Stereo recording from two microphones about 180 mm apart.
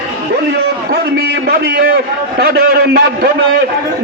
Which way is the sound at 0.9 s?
60° right (ahead or behind).